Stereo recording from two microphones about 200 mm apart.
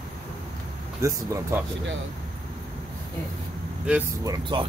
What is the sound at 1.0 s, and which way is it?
Speech, 15° right (ahead or behind).